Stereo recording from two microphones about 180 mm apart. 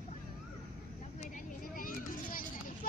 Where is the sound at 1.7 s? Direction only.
50° left (ahead or behind).